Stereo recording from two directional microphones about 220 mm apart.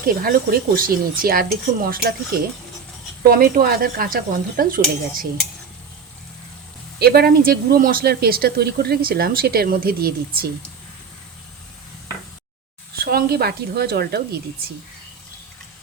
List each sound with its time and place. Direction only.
0.0 s speech: 40° right (ahead or behind)
3.2 s speech: 45° right (ahead or behind)
7.0 s speech: 45° right (ahead or behind)
13.0 s speech: 45° right (ahead or behind)